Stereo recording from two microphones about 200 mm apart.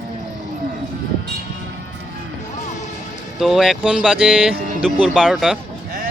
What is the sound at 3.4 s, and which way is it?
Speech, centre (ahead or behind).